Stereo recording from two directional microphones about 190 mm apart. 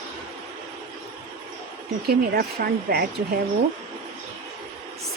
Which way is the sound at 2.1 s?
55° right (ahead or behind).